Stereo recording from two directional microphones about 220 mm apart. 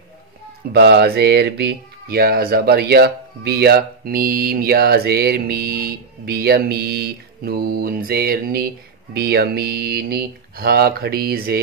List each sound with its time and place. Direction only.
0.7 s speech: 50° right (ahead or behind)